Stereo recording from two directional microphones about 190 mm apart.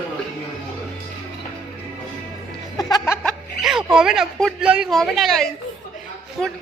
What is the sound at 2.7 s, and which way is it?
Speech, 20° left (ahead or behind).